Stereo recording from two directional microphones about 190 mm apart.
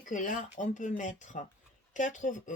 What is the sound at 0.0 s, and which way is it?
Speech, 45° left (ahead or behind).